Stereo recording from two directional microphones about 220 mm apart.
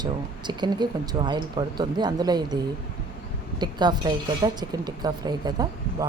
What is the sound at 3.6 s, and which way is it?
A woman's voice, 20° right (ahead or behind).